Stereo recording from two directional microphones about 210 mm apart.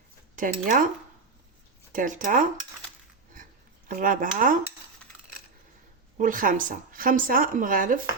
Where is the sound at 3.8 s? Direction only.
40° right (ahead or behind).